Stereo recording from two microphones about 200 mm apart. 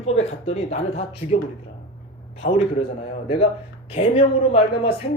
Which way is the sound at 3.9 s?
30° left (ahead or behind).